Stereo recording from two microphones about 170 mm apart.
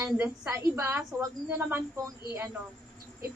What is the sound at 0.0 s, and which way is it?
A woman's voice, 15° right (ahead or behind).